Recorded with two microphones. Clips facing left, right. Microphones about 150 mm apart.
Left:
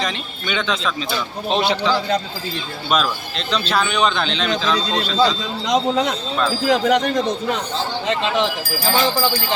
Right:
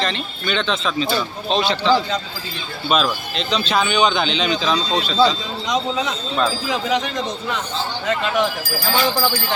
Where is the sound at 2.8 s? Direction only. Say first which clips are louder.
Right 1 dB; centre (ahead or behind).